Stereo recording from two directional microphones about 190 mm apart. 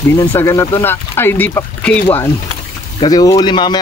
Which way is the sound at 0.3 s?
15° left (ahead or behind).